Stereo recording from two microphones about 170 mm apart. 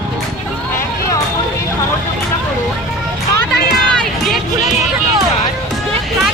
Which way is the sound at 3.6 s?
60° left (ahead or behind).